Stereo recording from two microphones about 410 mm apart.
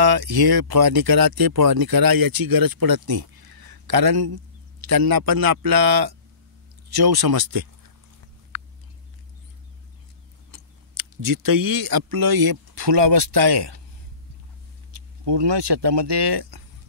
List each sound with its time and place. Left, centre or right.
0.0 s speech: right
10.5 s speech: right
14.9 s speech: right